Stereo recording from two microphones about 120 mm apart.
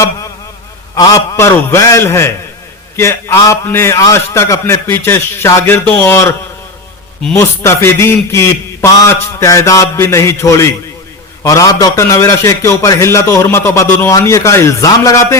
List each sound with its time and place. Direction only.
0.9 s a man's voice: 30° left (ahead or behind)
7.3 s a man's voice: 20° left (ahead or behind)